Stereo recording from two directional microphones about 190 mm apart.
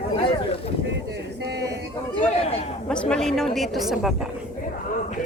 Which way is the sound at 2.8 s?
5° left (ahead or behind).